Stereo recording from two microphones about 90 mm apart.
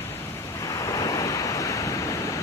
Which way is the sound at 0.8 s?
40° left (ahead or behind).